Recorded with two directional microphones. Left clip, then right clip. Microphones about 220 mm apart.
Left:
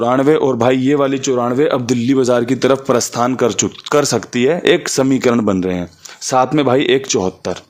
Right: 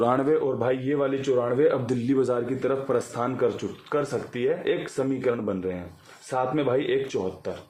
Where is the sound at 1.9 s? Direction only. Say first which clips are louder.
Left 10 dB; 35° left (ahead or behind).